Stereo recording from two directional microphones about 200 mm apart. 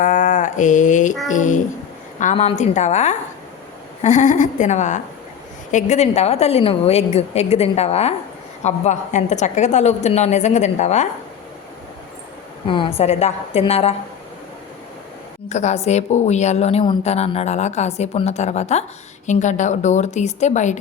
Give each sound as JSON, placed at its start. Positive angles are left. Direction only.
{"t": 0.0, "sound": "mantra", "side_deg": 40}
{"t": 1.3, "sound": "a woman's voice", "side_deg": 40}
{"t": 12.6, "sound": "a woman's voice", "side_deg": 25}
{"t": 15.4, "sound": "a woman's voice", "side_deg": 35}